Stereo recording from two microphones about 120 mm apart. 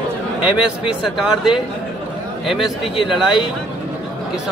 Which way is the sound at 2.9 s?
40° left (ahead or behind).